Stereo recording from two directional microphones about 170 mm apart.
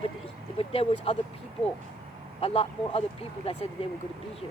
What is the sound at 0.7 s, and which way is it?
Speech, 35° left (ahead or behind).